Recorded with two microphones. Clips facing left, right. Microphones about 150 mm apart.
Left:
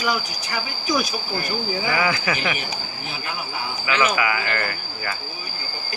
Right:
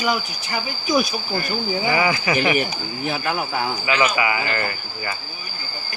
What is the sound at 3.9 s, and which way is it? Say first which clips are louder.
Speech: even; 10° right (ahead or behind).